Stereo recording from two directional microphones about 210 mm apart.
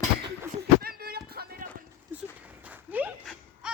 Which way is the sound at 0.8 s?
45° right (ahead or behind).